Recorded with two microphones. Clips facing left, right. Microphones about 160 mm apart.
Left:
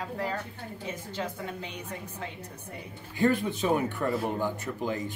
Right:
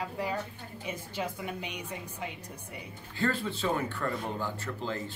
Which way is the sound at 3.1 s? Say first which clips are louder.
Left 5 dB; 15° left (ahead or behind).